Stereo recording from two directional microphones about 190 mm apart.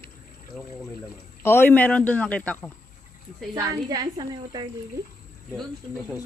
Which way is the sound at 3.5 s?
20° right (ahead or behind).